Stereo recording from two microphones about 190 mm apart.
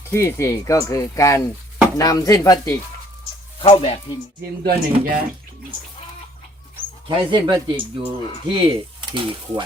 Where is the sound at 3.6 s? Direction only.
30° left (ahead or behind).